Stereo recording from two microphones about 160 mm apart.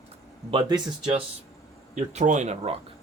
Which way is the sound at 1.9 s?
50° right (ahead or behind).